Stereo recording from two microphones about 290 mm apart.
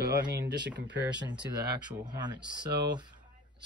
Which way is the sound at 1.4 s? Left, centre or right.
Centre.